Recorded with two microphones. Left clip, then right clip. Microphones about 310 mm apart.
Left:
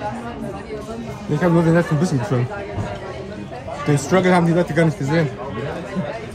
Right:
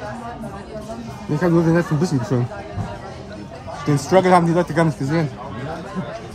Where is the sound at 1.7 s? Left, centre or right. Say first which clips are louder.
Left 1 dB; centre.